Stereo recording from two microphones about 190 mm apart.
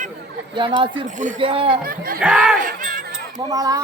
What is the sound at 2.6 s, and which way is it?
Crowd, 45° right (ahead or behind).